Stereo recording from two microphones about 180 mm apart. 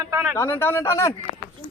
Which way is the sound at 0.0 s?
15° right (ahead or behind).